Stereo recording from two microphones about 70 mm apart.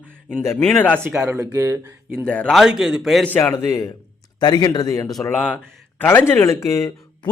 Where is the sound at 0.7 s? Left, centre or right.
Left.